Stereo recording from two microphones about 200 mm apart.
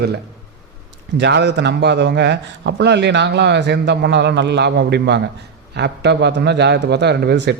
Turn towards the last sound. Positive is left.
turn(degrees=-55)  # may be behind; listen again after turning